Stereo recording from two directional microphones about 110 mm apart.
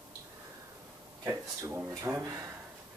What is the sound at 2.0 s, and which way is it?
Speech, 25° right (ahead or behind).